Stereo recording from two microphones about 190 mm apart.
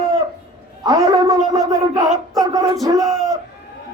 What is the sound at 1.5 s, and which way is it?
Crowd, 20° right (ahead or behind).